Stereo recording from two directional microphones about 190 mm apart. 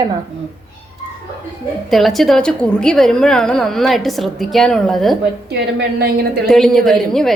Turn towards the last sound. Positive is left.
turn(degrees=0)  # may be behind; listen again after turning